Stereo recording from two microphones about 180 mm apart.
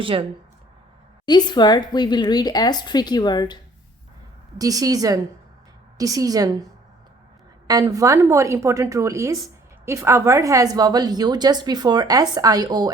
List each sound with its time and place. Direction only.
0.0 s a woman's voice: 30° right (ahead or behind)
1.2 s speech: 25° left (ahead or behind)
4.5 s a woman's voice: 20° right (ahead or behind)
7.7 s a woman's voice: 20° right (ahead or behind)